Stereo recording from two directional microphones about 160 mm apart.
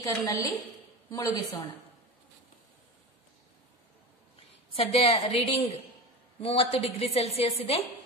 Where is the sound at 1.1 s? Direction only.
25° left (ahead or behind).